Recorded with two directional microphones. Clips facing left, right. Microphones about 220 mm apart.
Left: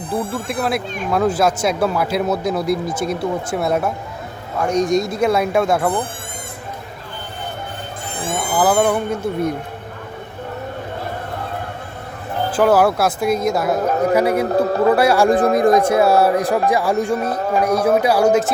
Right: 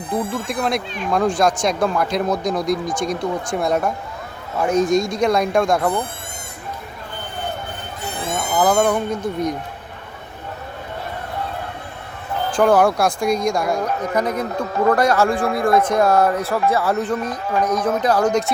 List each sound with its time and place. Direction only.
0.2 s speech: 5° left (ahead or behind)
8.4 s speech: 5° left (ahead or behind)
12.5 s speech: 5° left (ahead or behind)
14.5 s speech: 35° left (ahead or behind)
14.8 s speech: 10° left (ahead or behind)